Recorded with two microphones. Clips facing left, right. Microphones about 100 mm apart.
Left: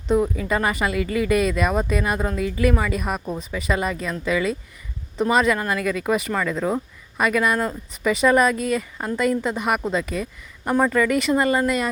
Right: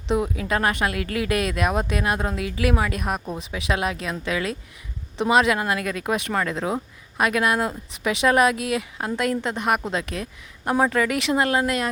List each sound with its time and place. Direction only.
0.1 s speech: 5° right (ahead or behind)